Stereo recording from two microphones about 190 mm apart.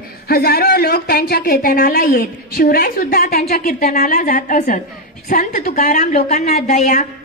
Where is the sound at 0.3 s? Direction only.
55° left (ahead or behind).